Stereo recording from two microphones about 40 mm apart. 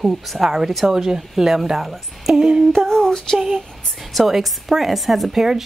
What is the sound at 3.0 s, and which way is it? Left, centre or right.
Female singing, centre.